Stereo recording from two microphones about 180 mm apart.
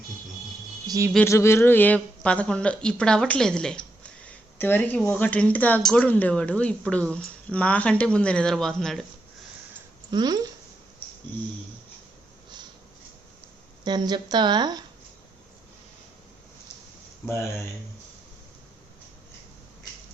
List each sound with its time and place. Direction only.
0.9 s speech: 20° right (ahead or behind)
1.1 s speech: 15° left (ahead or behind)
10.1 s a woman's voice: 25° right (ahead or behind)
13.8 s a woman's voice: 25° right (ahead or behind)